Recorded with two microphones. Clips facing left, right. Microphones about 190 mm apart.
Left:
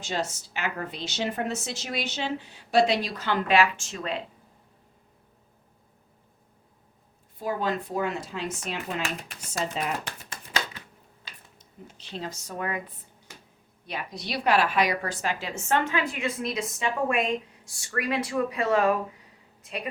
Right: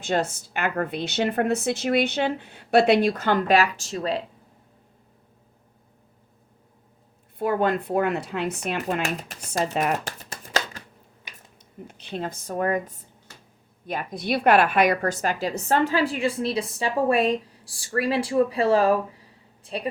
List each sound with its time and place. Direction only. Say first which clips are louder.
0.0 s a woman's voice: right 6 dB; 55° right (ahead or behind); by 4.2 s 35° right (ahead or behind)
7.3 s a woman's voice: right 6 dB; 60° right (ahead or behind)
9.7 s a sound: right 6 dB; 45° right (ahead or behind)
11.5 s a woman's voice: right 7 dB; 60° right (ahead or behind); by 19.9 s 30° right (ahead or behind)